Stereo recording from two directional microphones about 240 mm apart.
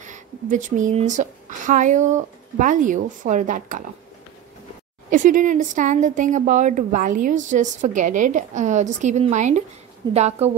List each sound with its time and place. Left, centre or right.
0.0 s a woman's voice: right
5.1 s a woman's voice: right